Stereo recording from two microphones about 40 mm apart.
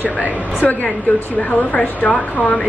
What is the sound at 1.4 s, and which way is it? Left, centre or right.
Speech, left.